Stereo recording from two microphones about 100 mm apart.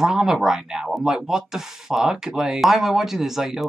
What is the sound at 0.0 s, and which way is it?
Speech, 5° right (ahead or behind).